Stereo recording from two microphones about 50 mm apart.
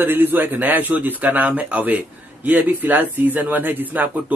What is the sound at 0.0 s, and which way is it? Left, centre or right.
A man's voice, right.